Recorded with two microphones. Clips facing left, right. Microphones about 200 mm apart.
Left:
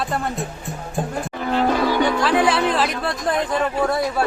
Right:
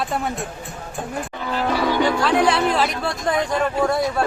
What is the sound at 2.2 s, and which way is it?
Speech, 5° left (ahead or behind).